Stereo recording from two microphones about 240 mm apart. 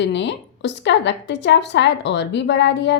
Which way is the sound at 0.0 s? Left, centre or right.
Left.